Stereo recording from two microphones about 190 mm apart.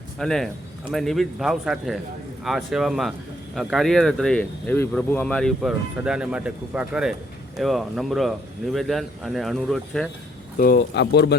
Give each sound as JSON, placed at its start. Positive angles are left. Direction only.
{"t": 0.2, "sound": "speech", "side_deg": 0}
{"t": 10.6, "sound": "speech", "side_deg": 60}